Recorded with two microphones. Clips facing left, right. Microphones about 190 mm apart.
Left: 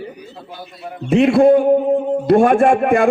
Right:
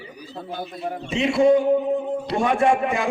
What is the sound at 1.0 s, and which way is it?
A man's voice, 55° left (ahead or behind).